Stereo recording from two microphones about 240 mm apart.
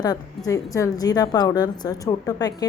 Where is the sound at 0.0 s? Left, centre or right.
Centre.